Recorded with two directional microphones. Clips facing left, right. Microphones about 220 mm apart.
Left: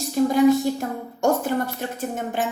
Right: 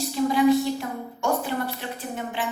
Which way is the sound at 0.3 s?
45° left (ahead or behind).